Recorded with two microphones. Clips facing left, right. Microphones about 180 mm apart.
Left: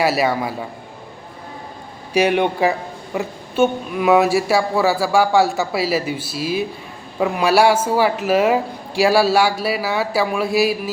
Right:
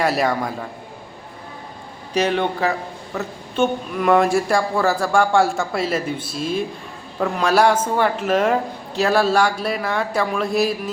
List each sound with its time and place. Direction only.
0.0 s a man's voice: 5° left (ahead or behind)
2.1 s speech: 15° left (ahead or behind)